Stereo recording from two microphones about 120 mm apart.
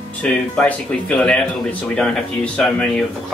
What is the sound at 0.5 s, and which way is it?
Speech, 10° left (ahead or behind).